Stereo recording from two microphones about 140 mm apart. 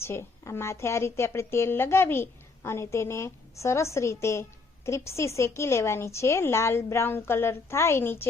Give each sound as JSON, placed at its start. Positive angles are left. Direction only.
{"t": 0.0, "sound": "a woman's voice", "side_deg": 20}